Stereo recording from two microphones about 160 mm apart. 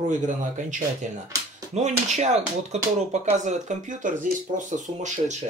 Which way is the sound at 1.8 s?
45° right (ahead or behind).